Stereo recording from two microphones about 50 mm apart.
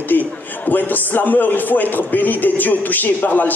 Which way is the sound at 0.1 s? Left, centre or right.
Left.